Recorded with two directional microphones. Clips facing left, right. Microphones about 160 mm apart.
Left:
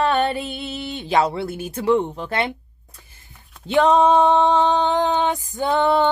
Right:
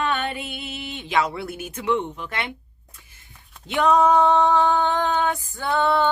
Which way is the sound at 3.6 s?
30° left (ahead or behind).